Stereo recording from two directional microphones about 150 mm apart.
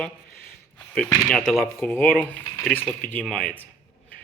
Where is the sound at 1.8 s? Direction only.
10° left (ahead or behind).